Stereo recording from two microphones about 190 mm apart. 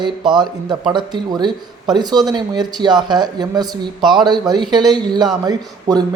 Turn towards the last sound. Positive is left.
turn(degrees=-20)  # may be behind; listen again after turning